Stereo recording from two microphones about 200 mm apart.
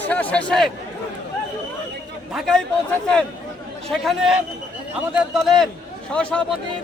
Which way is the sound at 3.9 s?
Centre (ahead or behind).